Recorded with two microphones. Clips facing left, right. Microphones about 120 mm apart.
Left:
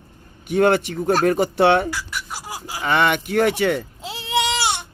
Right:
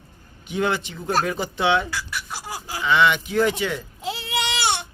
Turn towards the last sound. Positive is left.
turn(degrees=20)  # may be behind; listen again after turning